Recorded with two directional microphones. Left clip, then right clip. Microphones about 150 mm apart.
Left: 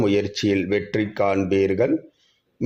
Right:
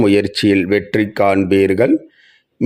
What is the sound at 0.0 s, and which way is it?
Speech, 40° right (ahead or behind).